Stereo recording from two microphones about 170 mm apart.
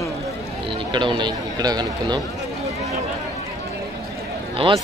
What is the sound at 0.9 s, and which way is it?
Speech, 25° right (ahead or behind).